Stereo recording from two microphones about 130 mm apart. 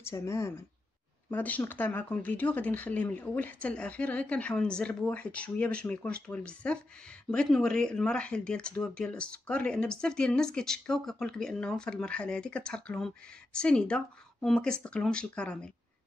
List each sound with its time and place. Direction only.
0.0 s speech: 20° left (ahead or behind)